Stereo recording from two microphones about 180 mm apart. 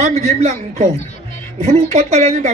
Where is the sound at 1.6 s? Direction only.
35° right (ahead or behind).